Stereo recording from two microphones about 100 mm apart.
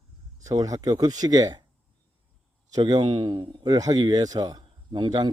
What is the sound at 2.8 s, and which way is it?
A man's voice, 55° right (ahead or behind).